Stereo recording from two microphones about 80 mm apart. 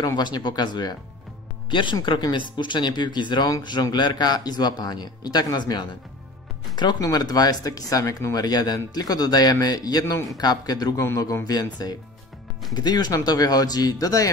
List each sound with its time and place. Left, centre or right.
0.0 s a man's voice: left
1.7 s speech: left
2.0 s a man's voice: left
8.5 s a man's voice: left